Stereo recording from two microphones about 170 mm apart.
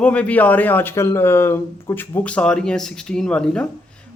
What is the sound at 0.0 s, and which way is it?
Speech, 5° left (ahead or behind).